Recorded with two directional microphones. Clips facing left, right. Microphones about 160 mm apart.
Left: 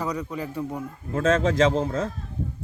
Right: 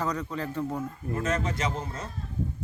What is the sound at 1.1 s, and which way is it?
Speech, 90° left.